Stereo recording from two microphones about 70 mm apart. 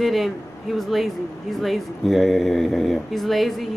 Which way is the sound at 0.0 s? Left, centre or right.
Centre.